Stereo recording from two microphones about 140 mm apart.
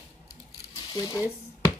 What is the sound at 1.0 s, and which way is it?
Speech, 25° left (ahead or behind).